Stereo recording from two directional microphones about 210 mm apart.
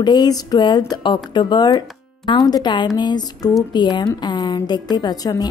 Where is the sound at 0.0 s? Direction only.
20° left (ahead or behind).